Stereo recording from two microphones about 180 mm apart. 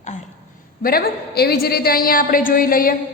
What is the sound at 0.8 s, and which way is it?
A woman's voice, 60° left (ahead or behind).